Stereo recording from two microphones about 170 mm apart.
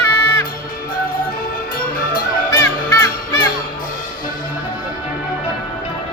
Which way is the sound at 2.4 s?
15° left (ahead or behind).